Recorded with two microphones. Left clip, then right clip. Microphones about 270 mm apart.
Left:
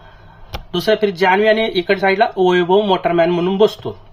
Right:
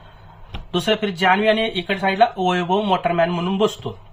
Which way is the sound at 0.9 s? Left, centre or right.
Centre.